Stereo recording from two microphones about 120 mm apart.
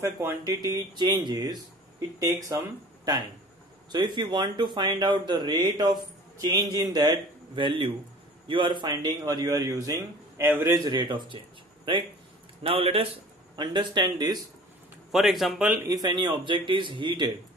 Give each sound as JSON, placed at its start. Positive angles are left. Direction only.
{"t": 0.0, "sound": "speech", "side_deg": -20}
{"t": 3.9, "sound": "a man's voice", "side_deg": -40}
{"t": 13.6, "sound": "speech", "side_deg": -40}
{"t": 15.0, "sound": "a man's voice", "side_deg": 0}
{"t": 15.9, "sound": "speech", "side_deg": -35}